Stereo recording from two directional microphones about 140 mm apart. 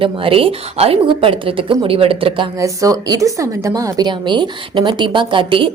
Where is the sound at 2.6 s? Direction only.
25° right (ahead or behind).